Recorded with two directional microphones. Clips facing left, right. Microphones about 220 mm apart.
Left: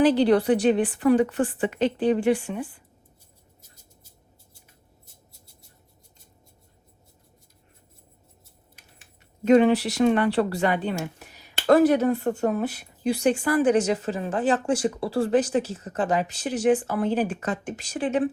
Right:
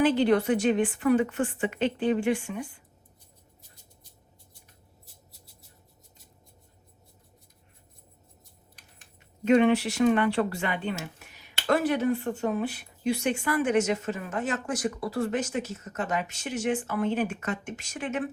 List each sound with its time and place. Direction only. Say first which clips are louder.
0.0 s speech: left 4 dB; 35° left (ahead or behind)
9.4 s speech: left 3 dB; 40° left (ahead or behind)